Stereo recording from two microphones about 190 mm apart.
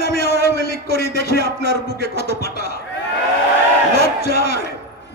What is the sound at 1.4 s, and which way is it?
Speech, 60° right (ahead or behind).